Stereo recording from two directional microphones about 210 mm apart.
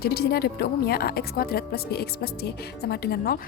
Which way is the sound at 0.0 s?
50° left (ahead or behind).